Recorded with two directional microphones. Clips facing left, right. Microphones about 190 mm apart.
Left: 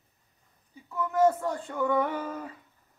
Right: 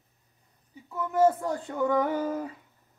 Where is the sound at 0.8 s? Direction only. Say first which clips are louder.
Even; 15° right (ahead or behind).